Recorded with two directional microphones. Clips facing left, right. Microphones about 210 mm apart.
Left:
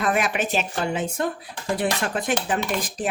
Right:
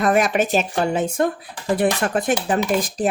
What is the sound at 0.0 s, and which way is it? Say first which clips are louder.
A woman's voice: right 5 dB; 40° right (ahead or behind).